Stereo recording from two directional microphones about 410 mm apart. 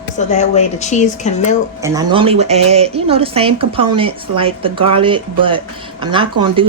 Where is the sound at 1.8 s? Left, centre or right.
Centre.